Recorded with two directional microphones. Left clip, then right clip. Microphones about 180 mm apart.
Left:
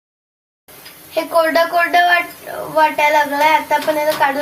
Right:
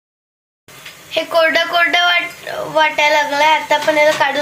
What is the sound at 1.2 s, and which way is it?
Speech, 10° right (ahead or behind).